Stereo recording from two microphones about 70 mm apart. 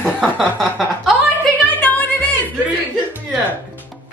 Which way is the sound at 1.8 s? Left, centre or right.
Centre.